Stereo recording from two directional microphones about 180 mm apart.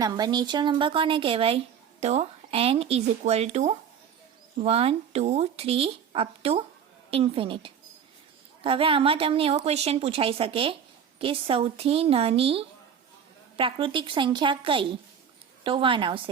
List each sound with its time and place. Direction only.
0.0 s a woman's voice: 25° right (ahead or behind)